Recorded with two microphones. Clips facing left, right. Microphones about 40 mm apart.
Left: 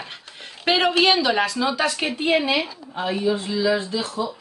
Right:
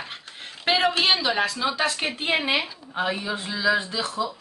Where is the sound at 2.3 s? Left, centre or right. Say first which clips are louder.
Left 3 dB; right.